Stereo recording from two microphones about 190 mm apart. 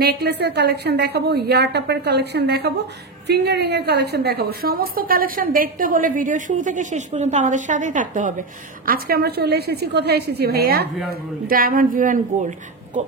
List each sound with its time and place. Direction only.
0.0 s a woman's voice: 60° right (ahead or behind)